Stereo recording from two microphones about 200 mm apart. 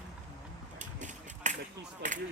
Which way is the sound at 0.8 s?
40° right (ahead or behind).